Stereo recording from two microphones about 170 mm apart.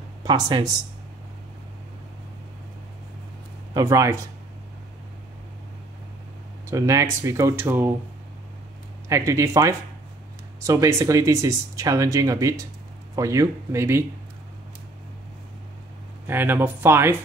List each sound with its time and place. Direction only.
0.2 s speech: 25° right (ahead or behind)
3.7 s speech: 20° right (ahead or behind)
6.7 s speech: 20° right (ahead or behind)
9.1 s speech: 15° right (ahead or behind)
16.3 s speech: 15° right (ahead or behind)